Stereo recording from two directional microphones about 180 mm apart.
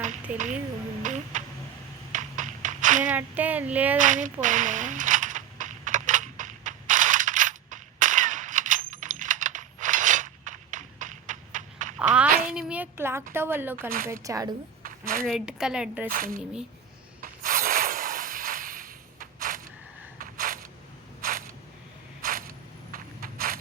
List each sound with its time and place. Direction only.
0.0 s a sound: 45° right (ahead or behind)
3.0 s speech: 10° right (ahead or behind)
3.9 s coin: 45° right (ahead or behind)
11.9 s a sound: 5° right (ahead or behind)
13.3 s a woman's voice: 15° right (ahead or behind)
15.3 s speech: 5° right (ahead or behind)
16.0 s speech: 50° right (ahead or behind)
16.4 s speech: 5° right (ahead or behind)
17.2 s a sound: 50° right (ahead or behind)
22.2 s scrape: 50° right (ahead or behind)